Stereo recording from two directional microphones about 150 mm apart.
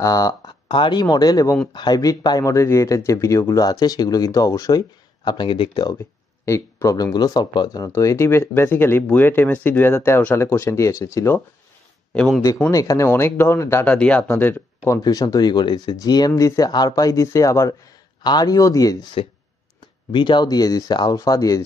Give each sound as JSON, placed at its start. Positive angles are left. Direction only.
{"t": 0.0, "sound": "speech", "side_deg": 25}
{"t": 6.4, "sound": "speech", "side_deg": 20}
{"t": 12.1, "sound": "speech", "side_deg": 5}
{"t": 12.7, "sound": "speech", "side_deg": 20}
{"t": 14.9, "sound": "speech", "side_deg": 25}
{"t": 20.1, "sound": "speech", "side_deg": 30}